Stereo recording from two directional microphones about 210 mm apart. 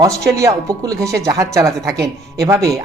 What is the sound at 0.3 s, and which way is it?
Speech, 15° right (ahead or behind).